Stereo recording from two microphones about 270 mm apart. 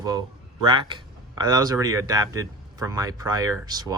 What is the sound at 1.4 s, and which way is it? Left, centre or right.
Speech, centre.